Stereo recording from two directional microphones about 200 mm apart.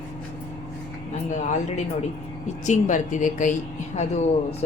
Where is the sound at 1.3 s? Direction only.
35° left (ahead or behind).